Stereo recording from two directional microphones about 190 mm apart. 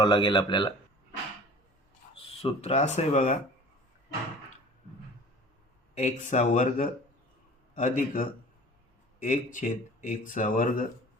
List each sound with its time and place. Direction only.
0.0 s speech: 25° left (ahead or behind)
2.1 s speech: 30° left (ahead or behind)
5.9 s speech: 40° left (ahead or behind)